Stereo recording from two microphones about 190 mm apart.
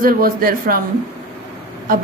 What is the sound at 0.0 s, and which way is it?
Speech, 50° right (ahead or behind).